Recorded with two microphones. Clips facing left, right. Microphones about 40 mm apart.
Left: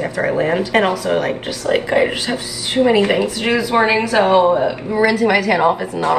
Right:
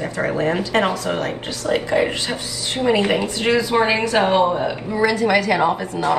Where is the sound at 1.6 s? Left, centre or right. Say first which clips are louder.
Left 3 dB; left.